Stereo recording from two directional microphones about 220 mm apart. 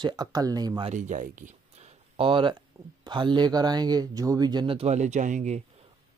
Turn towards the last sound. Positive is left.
turn(degrees=-35)  # may be behind; listen again after turning